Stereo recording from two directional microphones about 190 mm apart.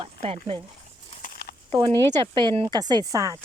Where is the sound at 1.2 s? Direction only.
55° left (ahead or behind).